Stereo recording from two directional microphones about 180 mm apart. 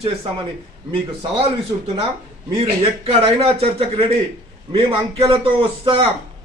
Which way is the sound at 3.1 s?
35° right (ahead or behind).